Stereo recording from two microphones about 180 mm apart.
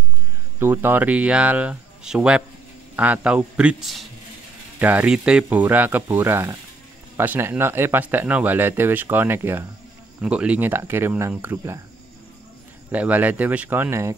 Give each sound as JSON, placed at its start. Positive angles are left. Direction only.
{"t": 0.6, "sound": "speech", "side_deg": -10}
{"t": 12.9, "sound": "speech", "side_deg": -10}